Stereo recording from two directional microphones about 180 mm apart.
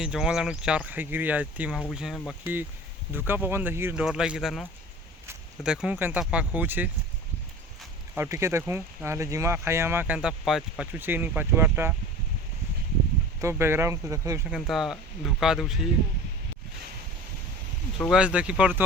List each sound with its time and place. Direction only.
0.0 s speech: 5° right (ahead or behind)
8.1 s speech: 15° right (ahead or behind)
13.4 s speech: 15° right (ahead or behind)
14.5 s speech: centre (ahead or behind)
18.1 s speech: 5° right (ahead or behind)